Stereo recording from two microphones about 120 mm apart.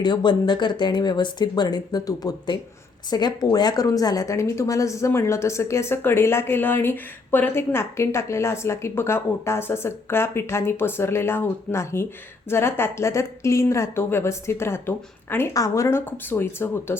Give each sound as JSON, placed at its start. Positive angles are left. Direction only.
{"t": 0.0, "sound": "a woman's voice", "side_deg": 40}